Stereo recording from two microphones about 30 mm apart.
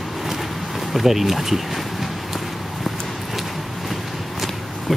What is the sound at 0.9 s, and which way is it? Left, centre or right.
Speech, centre.